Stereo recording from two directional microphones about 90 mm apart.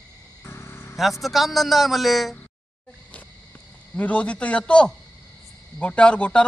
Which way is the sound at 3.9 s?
15° left (ahead or behind).